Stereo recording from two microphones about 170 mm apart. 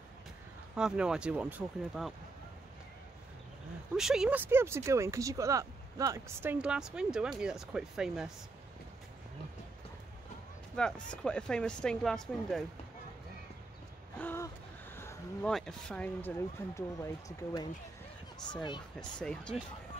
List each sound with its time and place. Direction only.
0.7 s speech: 5° right (ahead or behind)
3.9 s speech: 5° right (ahead or behind)
10.8 s speech: 5° left (ahead or behind)
14.1 s a sound: 10° left (ahead or behind)
15.5 s speech: 5° left (ahead or behind); by 18.8 s 25° left (ahead or behind)
18.9 s speech: 5° left (ahead or behind)